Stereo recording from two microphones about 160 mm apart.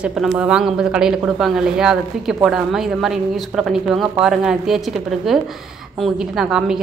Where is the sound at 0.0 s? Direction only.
5° right (ahead or behind).